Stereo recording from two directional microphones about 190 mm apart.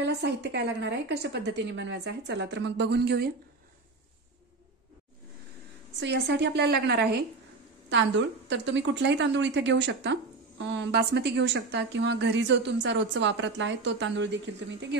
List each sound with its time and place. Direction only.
0.0 s a woman's voice: 60° right (ahead or behind)
5.9 s a woman's voice: 60° right (ahead or behind)
7.9 s a woman's voice: 70° right (ahead or behind)